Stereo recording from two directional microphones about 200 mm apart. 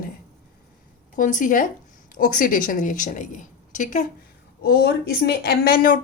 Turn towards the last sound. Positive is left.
turn(degrees=45)  # may be behind; listen again after turning